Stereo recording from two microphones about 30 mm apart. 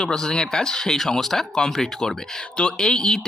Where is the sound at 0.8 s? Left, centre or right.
Centre.